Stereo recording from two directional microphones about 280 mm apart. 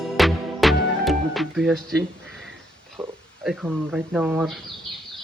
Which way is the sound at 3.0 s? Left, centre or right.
Centre.